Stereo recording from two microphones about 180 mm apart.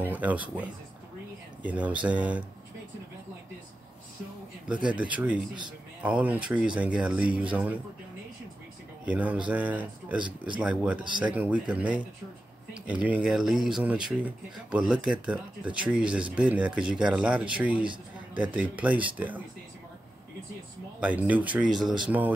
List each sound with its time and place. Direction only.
0.0 s speech: 10° right (ahead or behind)
4.9 s speech: 5° right (ahead or behind)
9.0 s speech: 5° right (ahead or behind)
10.2 s speech: 25° right (ahead or behind)
10.6 s speech: 5° right (ahead or behind)
21.0 s speech: 10° right (ahead or behind)